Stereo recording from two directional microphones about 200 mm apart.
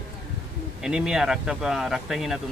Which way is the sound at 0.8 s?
5° right (ahead or behind).